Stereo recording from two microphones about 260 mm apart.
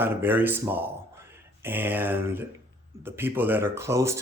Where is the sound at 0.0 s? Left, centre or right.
Centre.